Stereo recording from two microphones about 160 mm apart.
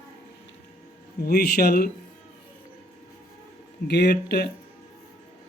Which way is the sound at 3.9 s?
90° left.